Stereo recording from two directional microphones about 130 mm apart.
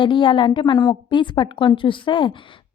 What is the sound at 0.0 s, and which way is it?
A woman's voice, 40° left (ahead or behind).